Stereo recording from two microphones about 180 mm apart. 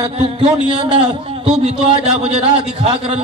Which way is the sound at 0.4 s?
30° right (ahead or behind).